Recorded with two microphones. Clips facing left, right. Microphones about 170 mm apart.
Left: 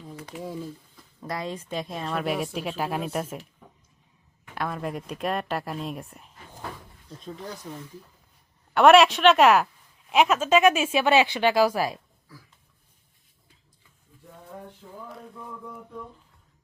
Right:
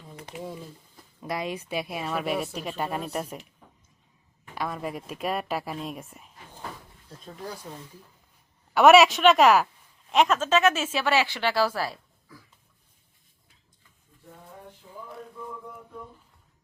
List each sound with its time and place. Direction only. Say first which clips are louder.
1.2 s a woman's voice: right 1 dB; 15° right (ahead or behind); by 3.3 s centre (ahead or behind)
4.5 s a woman's voice: left 1 dB; centre (ahead or behind)
8.7 s a woman's voice: even; 5° right (ahead or behind); by 11.9 s 15° left (ahead or behind)